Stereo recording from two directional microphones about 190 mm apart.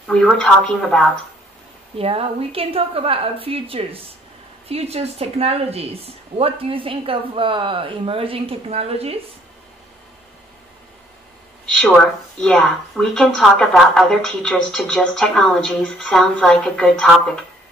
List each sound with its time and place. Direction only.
0.0 s speech: 5° left (ahead or behind)
2.0 s a woman's voice: 30° right (ahead or behind)
11.6 s speech: centre (ahead or behind)